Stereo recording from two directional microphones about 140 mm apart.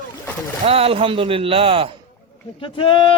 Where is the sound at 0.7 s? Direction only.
45° right (ahead or behind).